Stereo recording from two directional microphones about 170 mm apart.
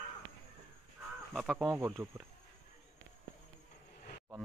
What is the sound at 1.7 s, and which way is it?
Speech, 15° right (ahead or behind).